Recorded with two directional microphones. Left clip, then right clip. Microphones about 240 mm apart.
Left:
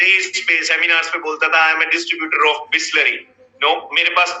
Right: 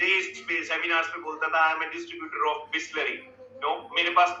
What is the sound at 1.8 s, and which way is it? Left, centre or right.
A man's voice, left.